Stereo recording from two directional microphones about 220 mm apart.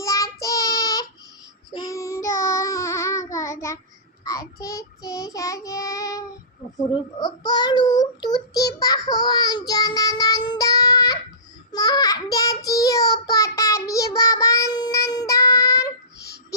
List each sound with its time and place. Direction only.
0.0 s child singing: 15° left (ahead or behind)